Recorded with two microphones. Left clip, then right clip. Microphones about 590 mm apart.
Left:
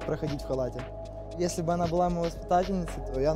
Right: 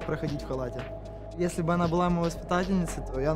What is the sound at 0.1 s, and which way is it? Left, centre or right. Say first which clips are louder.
Speech: left 2 dB; left.